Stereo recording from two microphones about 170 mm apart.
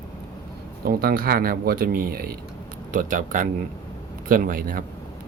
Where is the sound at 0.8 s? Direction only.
60° right (ahead or behind).